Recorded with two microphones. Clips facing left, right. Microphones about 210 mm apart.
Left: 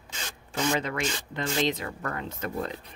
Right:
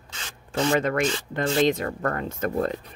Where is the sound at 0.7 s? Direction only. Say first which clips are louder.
Right 6 dB; 50° right (ahead or behind).